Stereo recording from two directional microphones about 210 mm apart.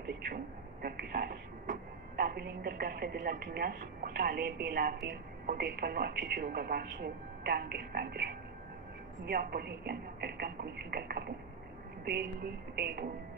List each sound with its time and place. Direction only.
0.8 s speech: 50° right (ahead or behind)